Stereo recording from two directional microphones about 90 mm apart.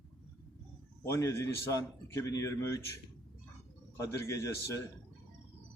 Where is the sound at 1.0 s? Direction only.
40° left (ahead or behind).